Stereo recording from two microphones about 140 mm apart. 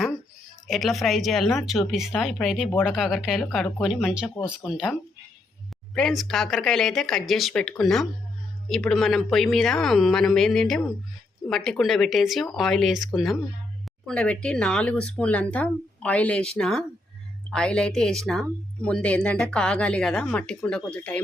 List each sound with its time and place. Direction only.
0.7 s speech: centre (ahead or behind)
14.1 s speech: 5° left (ahead or behind)